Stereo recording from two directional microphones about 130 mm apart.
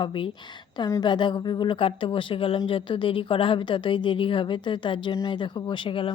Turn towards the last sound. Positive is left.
turn(degrees=45)  # may be behind; listen again after turning